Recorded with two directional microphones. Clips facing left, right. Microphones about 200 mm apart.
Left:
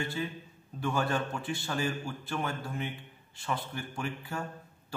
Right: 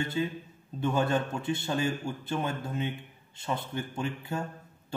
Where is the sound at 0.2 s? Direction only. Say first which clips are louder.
Right 5 dB; 20° right (ahead or behind).